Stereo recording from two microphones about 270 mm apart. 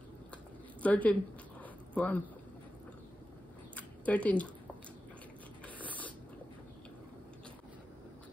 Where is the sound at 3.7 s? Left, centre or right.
Centre.